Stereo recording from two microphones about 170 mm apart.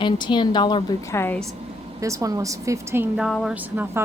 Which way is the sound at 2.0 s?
20° right (ahead or behind).